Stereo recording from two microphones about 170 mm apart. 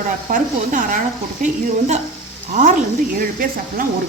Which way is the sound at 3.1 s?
60° right (ahead or behind).